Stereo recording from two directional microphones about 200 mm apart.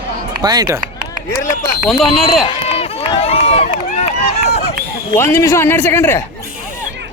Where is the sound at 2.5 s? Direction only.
30° left (ahead or behind).